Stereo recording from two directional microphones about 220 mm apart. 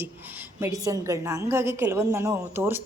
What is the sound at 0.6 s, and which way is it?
A woman's voice, 15° right (ahead or behind).